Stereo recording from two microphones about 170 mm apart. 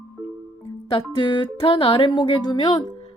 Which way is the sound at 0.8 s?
25° left (ahead or behind).